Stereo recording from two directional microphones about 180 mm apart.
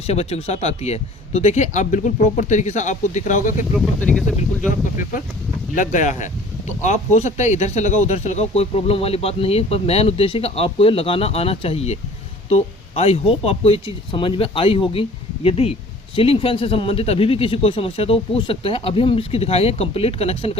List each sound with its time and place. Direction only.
0.1 s speech: 35° left (ahead or behind)
3.8 s speech: 5° left (ahead or behind)
5.7 s speech: 45° left (ahead or behind)